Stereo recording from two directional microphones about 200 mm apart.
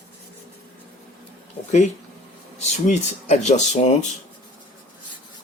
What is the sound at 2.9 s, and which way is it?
Speech, 35° left (ahead or behind).